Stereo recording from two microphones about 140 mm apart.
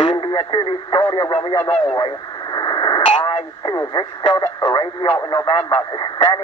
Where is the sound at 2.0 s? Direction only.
30° left (ahead or behind).